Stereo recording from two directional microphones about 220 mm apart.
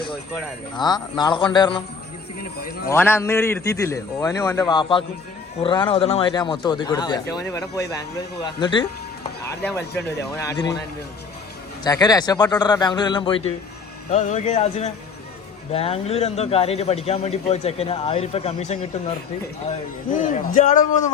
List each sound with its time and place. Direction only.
0.8 s speech: 20° left (ahead or behind)
2.9 s a man's voice: 10° left (ahead or behind)
11.8 s speech: 15° left (ahead or behind); by 21.0 s 35° left (ahead or behind)